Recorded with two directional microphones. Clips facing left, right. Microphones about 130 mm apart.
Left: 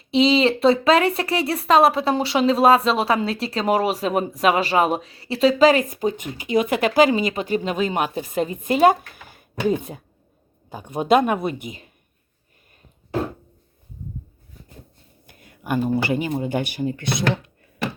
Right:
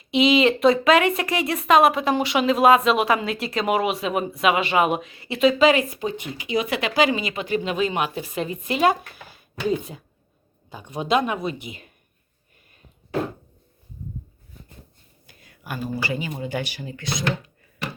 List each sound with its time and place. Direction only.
0.1 s speech: 30° left (ahead or behind); by 11.7 s 55° left (ahead or behind)
15.3 s speech: 55° left (ahead or behind)